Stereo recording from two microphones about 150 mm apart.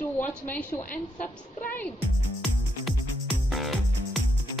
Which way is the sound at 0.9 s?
60° left (ahead or behind).